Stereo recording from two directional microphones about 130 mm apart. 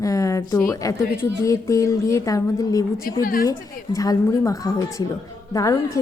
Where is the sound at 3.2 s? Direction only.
90° left.